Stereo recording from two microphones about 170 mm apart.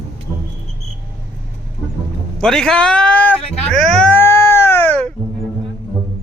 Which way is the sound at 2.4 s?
5° left (ahead or behind).